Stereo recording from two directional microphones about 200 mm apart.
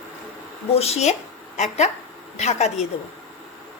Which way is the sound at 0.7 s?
30° left (ahead or behind).